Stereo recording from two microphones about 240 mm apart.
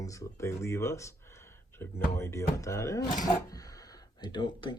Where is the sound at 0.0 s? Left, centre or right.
Centre.